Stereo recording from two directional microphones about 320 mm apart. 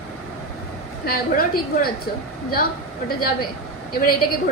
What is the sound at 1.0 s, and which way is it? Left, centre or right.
A woman's voice, left.